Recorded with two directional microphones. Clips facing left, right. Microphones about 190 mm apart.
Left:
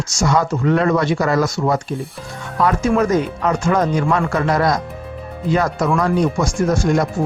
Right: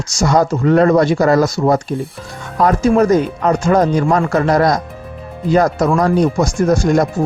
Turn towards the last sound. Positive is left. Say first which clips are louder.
# right 4 dB
turn(degrees=-40)  # may be behind; listen again after turning